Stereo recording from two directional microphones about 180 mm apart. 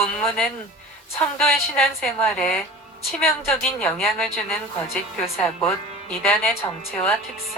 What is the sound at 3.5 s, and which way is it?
Speech, 5° left (ahead or behind).